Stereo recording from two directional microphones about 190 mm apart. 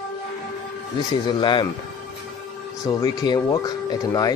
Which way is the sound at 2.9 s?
20° left (ahead or behind).